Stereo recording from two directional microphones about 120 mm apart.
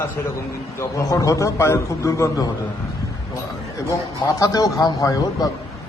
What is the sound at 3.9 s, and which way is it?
A man's voice, 30° left (ahead or behind).